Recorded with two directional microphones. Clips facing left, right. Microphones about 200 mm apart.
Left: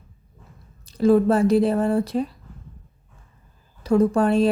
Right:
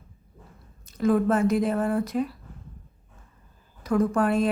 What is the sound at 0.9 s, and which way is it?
Speech, 30° left (ahead or behind).